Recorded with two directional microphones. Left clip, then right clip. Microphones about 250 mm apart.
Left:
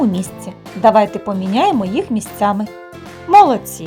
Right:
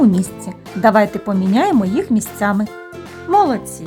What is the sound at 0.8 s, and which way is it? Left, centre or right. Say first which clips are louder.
Speech: left 2 dB; centre.